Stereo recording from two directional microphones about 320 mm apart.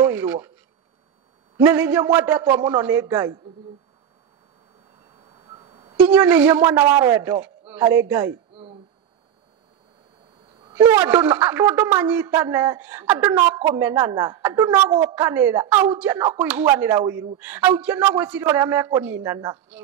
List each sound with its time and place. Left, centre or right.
0.0 s speech: centre
1.6 s speech: centre
5.5 s music: centre
5.9 s speech: centre
10.7 s a man's voice: centre